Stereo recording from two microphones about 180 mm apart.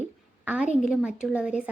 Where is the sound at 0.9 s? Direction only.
5° right (ahead or behind).